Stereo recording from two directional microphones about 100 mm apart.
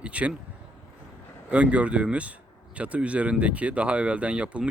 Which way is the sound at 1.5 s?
15° right (ahead or behind).